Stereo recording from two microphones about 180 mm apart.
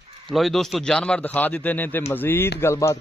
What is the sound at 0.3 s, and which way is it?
A man's voice, centre (ahead or behind).